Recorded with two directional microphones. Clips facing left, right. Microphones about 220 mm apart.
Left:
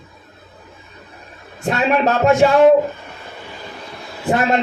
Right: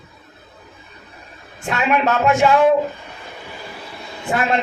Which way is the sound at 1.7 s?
40° left (ahead or behind).